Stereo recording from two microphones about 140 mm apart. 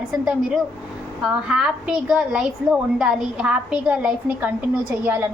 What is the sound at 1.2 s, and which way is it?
A woman's voice, 5° right (ahead or behind).